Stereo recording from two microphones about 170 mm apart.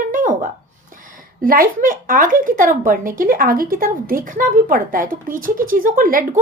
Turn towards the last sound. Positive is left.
turn(degrees=-55)  # may be behind; listen again after turning